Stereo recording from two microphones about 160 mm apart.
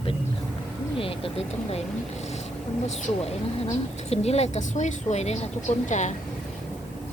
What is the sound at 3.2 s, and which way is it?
Speech, 40° left (ahead or behind).